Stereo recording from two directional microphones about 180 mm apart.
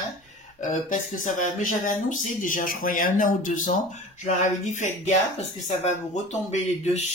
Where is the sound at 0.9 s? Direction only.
45° left (ahead or behind).